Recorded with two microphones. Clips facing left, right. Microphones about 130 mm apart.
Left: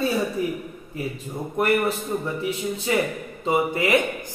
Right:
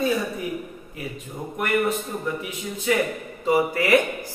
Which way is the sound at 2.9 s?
35° left (ahead or behind).